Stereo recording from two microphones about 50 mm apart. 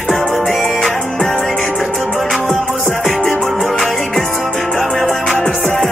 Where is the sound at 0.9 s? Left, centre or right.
Left.